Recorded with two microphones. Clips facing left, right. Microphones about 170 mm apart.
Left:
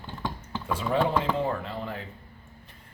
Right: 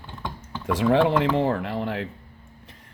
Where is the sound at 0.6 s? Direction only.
90° right.